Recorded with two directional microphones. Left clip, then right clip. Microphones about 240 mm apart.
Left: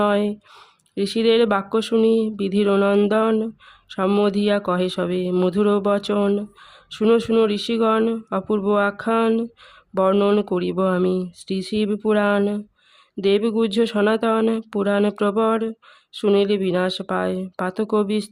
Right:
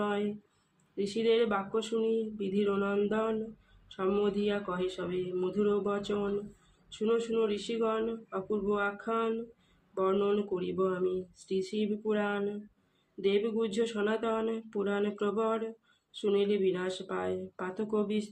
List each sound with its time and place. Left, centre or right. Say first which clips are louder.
0.0 s speech: left 13 dB; left